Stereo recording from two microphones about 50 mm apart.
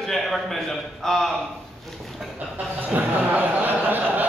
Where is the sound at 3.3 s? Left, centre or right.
Right.